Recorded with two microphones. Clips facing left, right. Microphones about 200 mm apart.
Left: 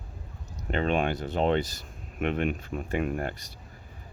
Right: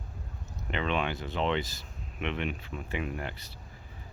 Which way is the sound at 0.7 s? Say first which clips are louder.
Left 5 dB; 45° left (ahead or behind).